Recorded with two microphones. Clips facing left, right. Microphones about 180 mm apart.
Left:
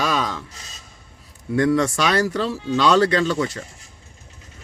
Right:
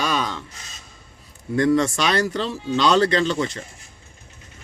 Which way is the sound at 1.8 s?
Centre (ahead or behind).